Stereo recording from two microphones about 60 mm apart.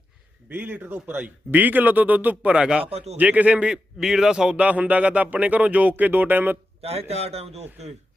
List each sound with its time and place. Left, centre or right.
0.5 s a man's voice: right; by 4.5 s centre
4.5 s speech: right